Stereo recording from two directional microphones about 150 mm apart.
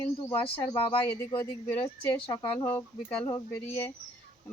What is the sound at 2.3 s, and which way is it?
Speech, 30° left (ahead or behind).